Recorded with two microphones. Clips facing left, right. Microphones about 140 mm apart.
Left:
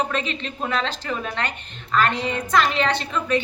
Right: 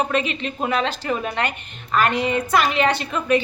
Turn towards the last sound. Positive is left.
turn(degrees=-10)  # may be behind; listen again after turning